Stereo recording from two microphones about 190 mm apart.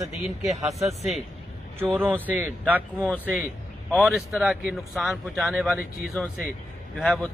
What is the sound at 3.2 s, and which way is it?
Speech, 10° right (ahead or behind).